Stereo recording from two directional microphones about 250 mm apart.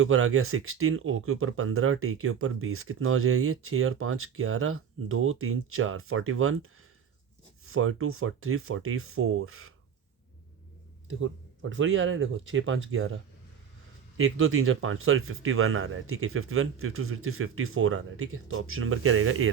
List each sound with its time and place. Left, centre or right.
0.0 s speech: right
11.7 s speech: right
14.2 s speech: right